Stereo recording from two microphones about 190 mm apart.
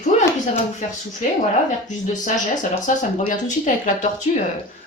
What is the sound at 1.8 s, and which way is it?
Speech, 40° left (ahead or behind).